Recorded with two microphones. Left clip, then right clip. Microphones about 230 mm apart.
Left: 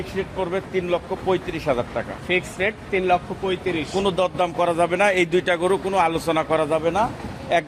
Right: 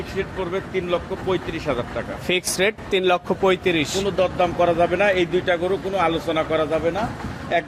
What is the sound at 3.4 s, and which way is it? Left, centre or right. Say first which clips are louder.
Speech: right 5 dB; right.